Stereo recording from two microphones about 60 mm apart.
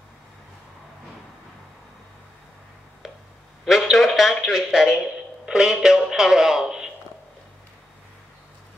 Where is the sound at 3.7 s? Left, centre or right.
Centre.